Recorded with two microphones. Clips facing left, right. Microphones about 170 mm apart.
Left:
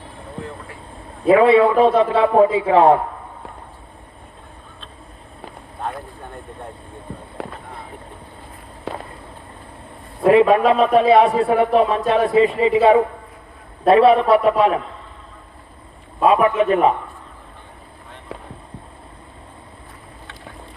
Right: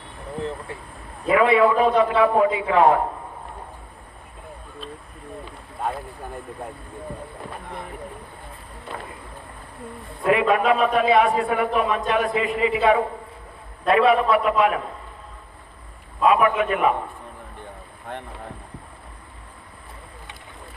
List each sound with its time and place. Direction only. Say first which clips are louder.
1.3 s a man's voice: left 5 dB; 30° left (ahead or behind)
7.1 s speech: left 1 dB; 25° left (ahead or behind)
8.9 s a sound: left 6 dB; 90° left
10.2 s a man's voice: left 6 dB; 30° left (ahead or behind)
16.3 s a man's voice: left 5 dB; 30° left (ahead or behind)